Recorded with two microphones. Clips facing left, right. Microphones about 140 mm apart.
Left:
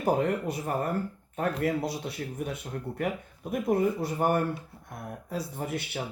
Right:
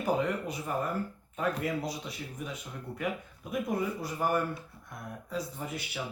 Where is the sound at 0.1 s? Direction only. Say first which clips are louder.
Left 4 dB; 55° left (ahead or behind).